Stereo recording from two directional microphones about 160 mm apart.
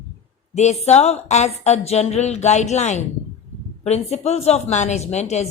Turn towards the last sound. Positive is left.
turn(degrees=45)  # may be behind; listen again after turning